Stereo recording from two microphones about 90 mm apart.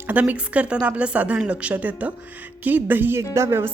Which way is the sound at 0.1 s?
20° right (ahead or behind).